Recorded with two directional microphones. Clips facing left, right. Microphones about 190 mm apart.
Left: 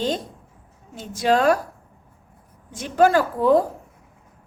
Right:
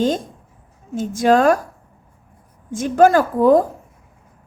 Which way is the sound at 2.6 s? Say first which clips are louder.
Right 4 dB; 50° right (ahead or behind).